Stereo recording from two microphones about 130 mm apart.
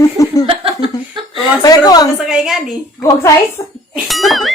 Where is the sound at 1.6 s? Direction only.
30° left (ahead or behind).